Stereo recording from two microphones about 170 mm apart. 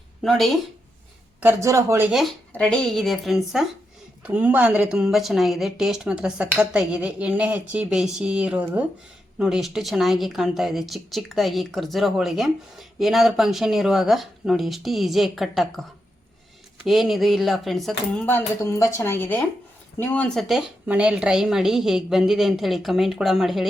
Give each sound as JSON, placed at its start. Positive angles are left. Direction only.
{"t": 0.2, "sound": "speech", "side_deg": 0}
{"t": 1.4, "sound": "speech", "side_deg": -15}
{"t": 2.0, "sound": "speech", "side_deg": 0}
{"t": 16.8, "sound": "speech", "side_deg": 0}
{"t": 18.3, "sound": "a woman's voice", "side_deg": 15}